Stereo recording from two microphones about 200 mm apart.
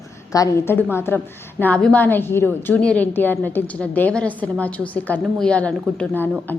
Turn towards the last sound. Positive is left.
turn(degrees=10)  # may be behind; listen again after turning